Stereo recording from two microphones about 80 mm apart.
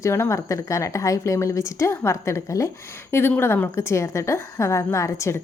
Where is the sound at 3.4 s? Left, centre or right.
Left.